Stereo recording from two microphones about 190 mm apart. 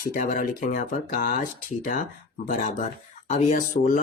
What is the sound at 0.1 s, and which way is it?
Speech, 45° left (ahead or behind).